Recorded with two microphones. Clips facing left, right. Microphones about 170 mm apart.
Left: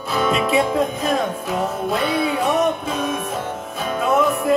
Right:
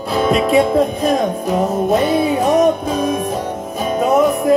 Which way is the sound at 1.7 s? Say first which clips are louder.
Right 8 dB; 45° right (ahead or behind).